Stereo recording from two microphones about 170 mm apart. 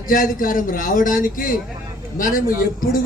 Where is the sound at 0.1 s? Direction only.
55° left (ahead or behind).